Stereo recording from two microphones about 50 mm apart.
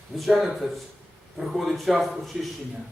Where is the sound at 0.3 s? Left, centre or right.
Centre.